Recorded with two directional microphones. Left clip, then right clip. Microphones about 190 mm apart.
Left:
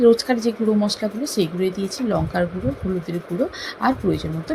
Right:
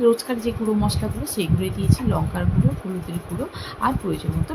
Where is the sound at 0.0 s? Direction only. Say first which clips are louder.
Left 4 dB; 20° left (ahead or behind).